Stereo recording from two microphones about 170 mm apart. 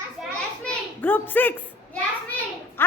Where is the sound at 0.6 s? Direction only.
10° left (ahead or behind).